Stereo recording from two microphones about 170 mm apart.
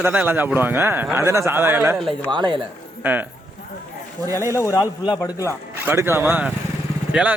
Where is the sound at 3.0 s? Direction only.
10° right (ahead or behind).